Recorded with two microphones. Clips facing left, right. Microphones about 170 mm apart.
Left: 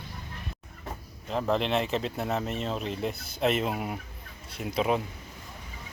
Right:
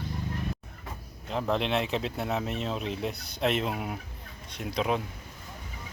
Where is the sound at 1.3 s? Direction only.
Centre (ahead or behind).